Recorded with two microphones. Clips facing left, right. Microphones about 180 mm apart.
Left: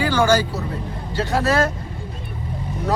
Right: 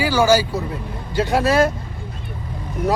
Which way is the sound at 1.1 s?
15° right (ahead or behind).